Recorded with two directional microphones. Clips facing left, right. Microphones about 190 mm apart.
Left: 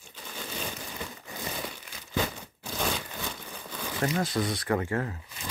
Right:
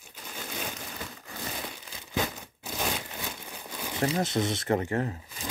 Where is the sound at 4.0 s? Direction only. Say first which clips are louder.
Right 1 dB; 20° right (ahead or behind).